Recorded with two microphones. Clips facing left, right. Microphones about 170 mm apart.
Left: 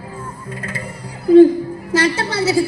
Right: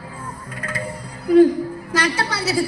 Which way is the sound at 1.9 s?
25° left (ahead or behind).